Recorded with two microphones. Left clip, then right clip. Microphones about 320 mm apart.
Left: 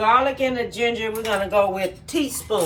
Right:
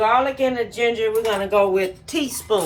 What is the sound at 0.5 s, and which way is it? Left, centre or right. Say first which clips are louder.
Speech: right 2 dB; right.